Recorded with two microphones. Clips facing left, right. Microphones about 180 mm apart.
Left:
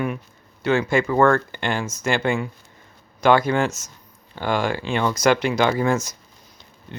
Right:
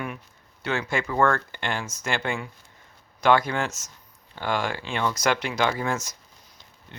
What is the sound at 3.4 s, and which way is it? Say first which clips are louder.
Speech: left 6 dB; 5° left (ahead or behind).